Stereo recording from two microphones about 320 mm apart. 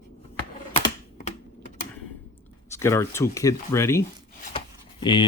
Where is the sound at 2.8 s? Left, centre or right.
Centre.